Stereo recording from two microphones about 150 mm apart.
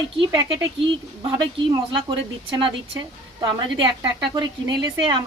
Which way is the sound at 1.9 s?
35° right (ahead or behind).